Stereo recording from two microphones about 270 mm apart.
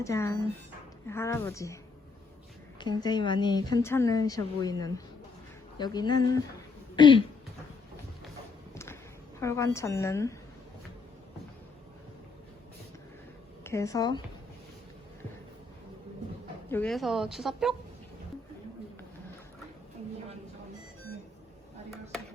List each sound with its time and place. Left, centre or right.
0.0 s a woman's voice: centre
8.7 s walk: centre
9.4 s a woman's voice: centre
13.7 s a woman's voice: centre
16.6 s speech: centre